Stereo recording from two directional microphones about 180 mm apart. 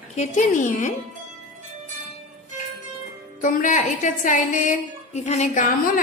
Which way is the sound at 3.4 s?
45° left (ahead or behind).